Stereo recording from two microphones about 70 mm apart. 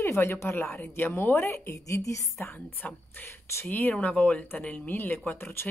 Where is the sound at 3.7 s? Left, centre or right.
Left.